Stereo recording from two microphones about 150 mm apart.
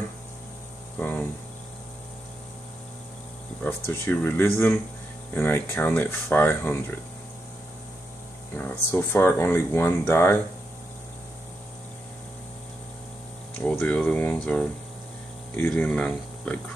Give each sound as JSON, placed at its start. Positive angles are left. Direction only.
{"t": 0.9, "sound": "cricket", "side_deg": 10}
{"t": 3.6, "sound": "speech", "side_deg": 15}
{"t": 8.5, "sound": "speech", "side_deg": 15}
{"t": 13.6, "sound": "speech", "side_deg": 10}